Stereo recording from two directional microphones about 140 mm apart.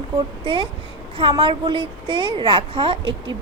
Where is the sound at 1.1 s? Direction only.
35° right (ahead or behind).